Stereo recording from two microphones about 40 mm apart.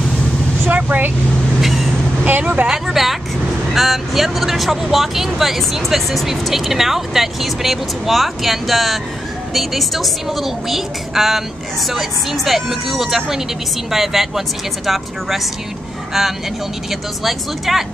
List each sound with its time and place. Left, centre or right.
0.8 s speech: right
1.6 s vehicle: centre
2.2 s speech: right
2.7 s speech: centre